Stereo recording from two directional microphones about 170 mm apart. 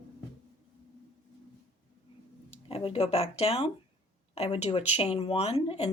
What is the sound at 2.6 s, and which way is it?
Speech, 35° left (ahead or behind).